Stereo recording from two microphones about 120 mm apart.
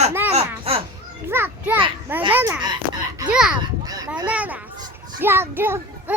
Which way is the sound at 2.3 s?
20° right (ahead or behind).